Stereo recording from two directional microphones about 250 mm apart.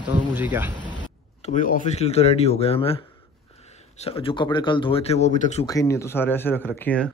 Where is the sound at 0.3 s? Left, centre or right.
Centre.